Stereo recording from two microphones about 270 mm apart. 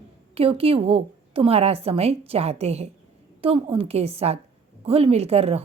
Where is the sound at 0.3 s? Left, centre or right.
Right.